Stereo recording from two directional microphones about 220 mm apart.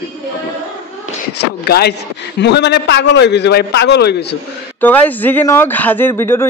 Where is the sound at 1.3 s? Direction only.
45° left (ahead or behind).